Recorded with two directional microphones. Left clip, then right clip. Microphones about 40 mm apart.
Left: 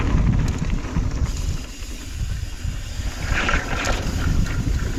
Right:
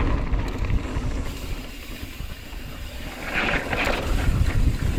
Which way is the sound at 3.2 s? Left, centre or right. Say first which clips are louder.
Left 1 dB; left.